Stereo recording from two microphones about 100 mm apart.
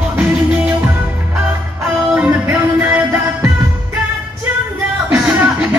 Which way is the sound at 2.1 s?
15° right (ahead or behind).